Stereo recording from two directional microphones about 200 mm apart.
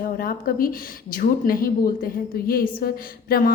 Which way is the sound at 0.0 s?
45° left (ahead or behind).